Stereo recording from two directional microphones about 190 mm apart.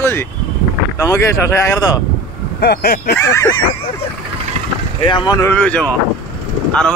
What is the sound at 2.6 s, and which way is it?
Speech, 55° left (ahead or behind).